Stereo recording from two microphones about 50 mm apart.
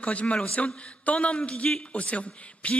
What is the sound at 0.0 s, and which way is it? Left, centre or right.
A man's voice, left.